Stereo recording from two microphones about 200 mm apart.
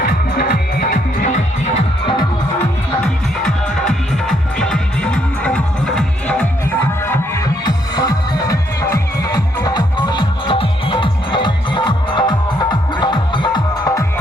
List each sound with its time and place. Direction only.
0.0 s music: 50° left (ahead or behind)
3.4 s music: 5° left (ahead or behind); by 14.0 s 20° left (ahead or behind)